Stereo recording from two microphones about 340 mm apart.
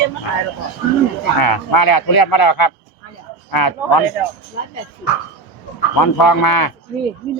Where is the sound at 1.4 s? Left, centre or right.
Left.